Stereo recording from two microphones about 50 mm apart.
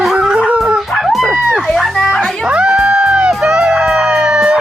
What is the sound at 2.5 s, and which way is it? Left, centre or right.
Music, centre.